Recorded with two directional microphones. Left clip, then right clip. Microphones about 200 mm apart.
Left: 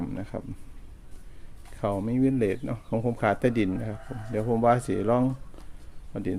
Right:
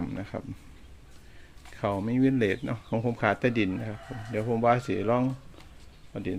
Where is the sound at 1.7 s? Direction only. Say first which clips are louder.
Left 1 dB; 15° left (ahead or behind).